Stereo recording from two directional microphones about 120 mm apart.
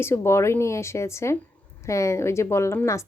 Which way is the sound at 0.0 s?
20° left (ahead or behind).